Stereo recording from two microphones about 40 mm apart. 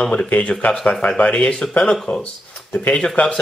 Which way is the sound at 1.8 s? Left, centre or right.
Centre.